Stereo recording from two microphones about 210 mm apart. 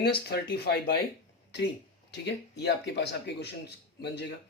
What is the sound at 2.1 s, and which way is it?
Speech, 55° left (ahead or behind).